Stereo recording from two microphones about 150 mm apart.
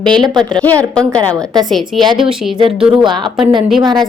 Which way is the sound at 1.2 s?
20° right (ahead or behind).